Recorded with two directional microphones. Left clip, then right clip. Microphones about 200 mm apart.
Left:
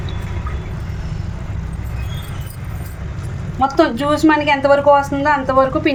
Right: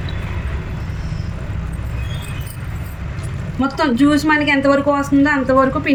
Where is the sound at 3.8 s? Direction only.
50° left (ahead or behind).